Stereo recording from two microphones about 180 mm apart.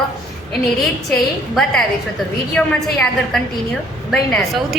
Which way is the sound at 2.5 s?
5° left (ahead or behind).